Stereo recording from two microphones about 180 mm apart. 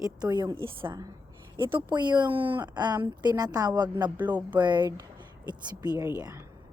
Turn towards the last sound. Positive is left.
turn(degrees=-15)  # may be behind; listen again after turning